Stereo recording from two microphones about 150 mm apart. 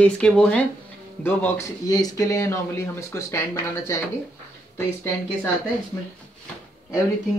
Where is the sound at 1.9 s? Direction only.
25° left (ahead or behind).